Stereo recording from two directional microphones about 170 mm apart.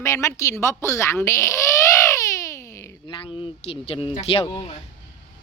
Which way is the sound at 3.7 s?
35° left (ahead or behind).